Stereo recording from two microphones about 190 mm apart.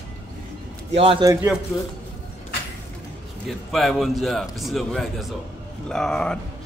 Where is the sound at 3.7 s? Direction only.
Centre (ahead or behind).